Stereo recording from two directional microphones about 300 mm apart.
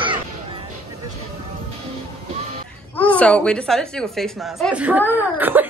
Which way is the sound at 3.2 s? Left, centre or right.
Centre.